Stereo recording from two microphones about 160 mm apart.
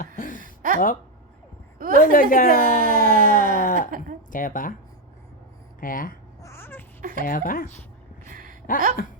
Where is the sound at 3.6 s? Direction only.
60° left (ahead or behind).